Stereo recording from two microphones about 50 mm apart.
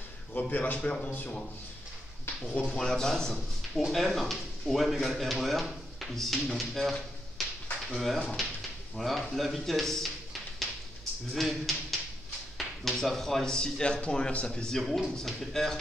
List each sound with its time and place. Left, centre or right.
0.3 s a man's voice: left
0.7 s speech: centre
2.2 s speech: left
2.8 s a man's voice: centre
11.3 s speech: centre